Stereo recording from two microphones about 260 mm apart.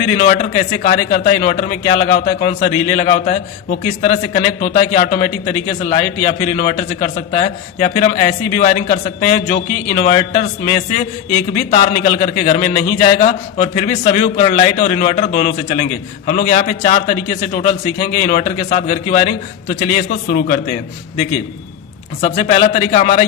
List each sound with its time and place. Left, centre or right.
0.2 s a man's voice: left
22.2 s a man's voice: left